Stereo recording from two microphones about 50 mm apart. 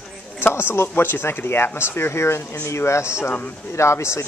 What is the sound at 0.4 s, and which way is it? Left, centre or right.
Speech, left.